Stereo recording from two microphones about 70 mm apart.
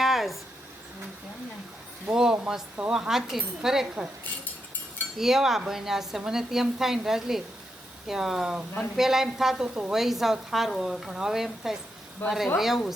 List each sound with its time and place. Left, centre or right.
0.0 s a sound: centre
2.0 s speech: centre
5.1 s a woman's voice: centre
12.2 s speech: left
12.5 s a woman's voice: centre